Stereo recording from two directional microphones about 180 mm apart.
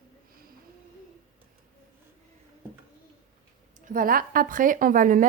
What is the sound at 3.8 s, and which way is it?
A woman's voice, 50° right (ahead or behind).